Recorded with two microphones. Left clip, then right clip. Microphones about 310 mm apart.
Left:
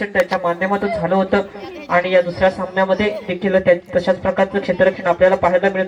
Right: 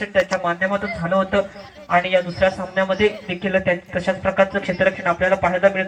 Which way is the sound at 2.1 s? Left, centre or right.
Centre.